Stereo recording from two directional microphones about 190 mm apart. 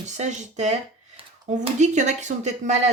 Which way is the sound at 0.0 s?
40° right (ahead or behind).